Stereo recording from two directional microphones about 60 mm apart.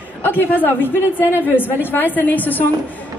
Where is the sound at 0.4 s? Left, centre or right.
Left.